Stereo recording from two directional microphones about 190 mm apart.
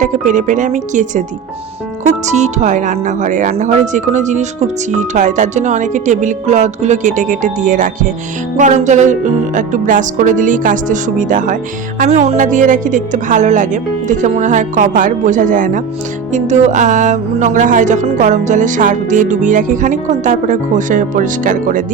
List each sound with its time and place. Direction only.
0.0 s speech: 40° right (ahead or behind)
8.5 s music: 40° right (ahead or behind)
11.9 s speech: 35° right (ahead or behind)
14.1 s music: 40° right (ahead or behind)
16.3 s speech: 40° right (ahead or behind)